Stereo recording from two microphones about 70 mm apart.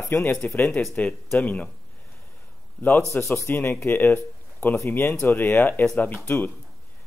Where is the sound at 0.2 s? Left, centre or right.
Left.